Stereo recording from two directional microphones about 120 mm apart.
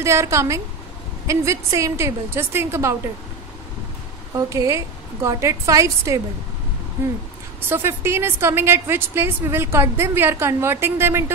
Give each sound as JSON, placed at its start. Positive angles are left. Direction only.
{"t": 0.0, "sound": "a woman's voice", "side_deg": -25}
{"t": 4.5, "sound": "a woman's voice", "side_deg": -25}
{"t": 7.6, "sound": "a woman's voice", "side_deg": -20}